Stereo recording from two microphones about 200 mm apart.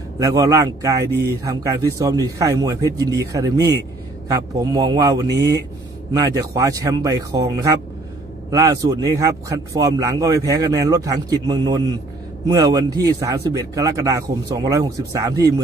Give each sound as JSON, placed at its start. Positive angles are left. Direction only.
{"t": 0.2, "sound": "speech", "side_deg": -15}
{"t": 1.1, "sound": "speech", "side_deg": -55}
{"t": 1.4, "sound": "speech", "side_deg": -15}
{"t": 4.6, "sound": "speech", "side_deg": -20}